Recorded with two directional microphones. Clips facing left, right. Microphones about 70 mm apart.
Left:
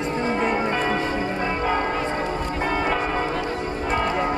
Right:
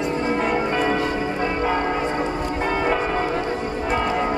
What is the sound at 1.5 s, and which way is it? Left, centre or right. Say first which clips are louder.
Church bell: right 1 dB; centre.